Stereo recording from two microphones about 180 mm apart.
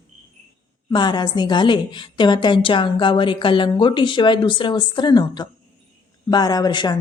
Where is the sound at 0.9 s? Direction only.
25° left (ahead or behind).